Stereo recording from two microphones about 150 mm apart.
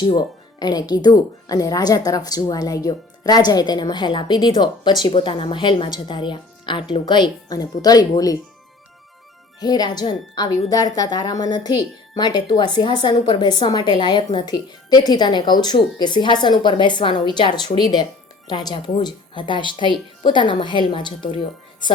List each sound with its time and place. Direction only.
0.0 s speech: 30° left (ahead or behind)
9.6 s a woman's voice: 25° left (ahead or behind)